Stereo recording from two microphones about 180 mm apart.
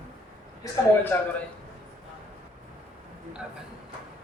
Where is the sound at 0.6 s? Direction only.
20° left (ahead or behind).